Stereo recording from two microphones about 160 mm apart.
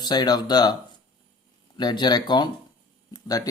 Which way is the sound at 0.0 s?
25° left (ahead or behind).